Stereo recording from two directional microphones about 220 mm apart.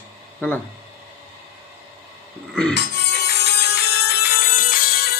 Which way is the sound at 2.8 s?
50° left (ahead or behind).